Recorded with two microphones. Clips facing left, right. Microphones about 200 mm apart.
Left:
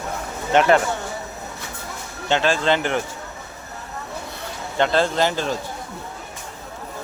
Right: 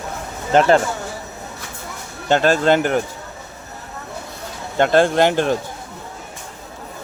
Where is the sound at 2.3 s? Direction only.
45° right (ahead or behind).